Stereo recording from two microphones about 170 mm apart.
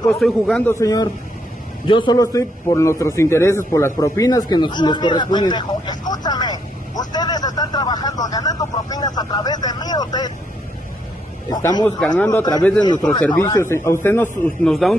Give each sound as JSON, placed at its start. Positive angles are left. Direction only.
{"t": 0.2, "sound": "a man's voice", "side_deg": 5}
{"t": 0.7, "sound": "a man's voice", "side_deg": 20}
{"t": 11.5, "sound": "speech", "side_deg": 25}
{"t": 14.6, "sound": "a man's voice", "side_deg": 0}